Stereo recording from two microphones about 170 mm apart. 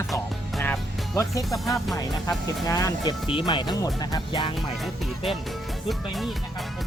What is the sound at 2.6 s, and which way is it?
Speech, 20° left (ahead or behind).